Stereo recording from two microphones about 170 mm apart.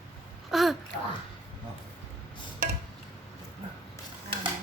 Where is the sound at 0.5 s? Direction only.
Centre (ahead or behind).